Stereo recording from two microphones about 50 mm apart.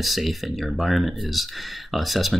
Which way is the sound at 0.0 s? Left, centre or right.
Centre.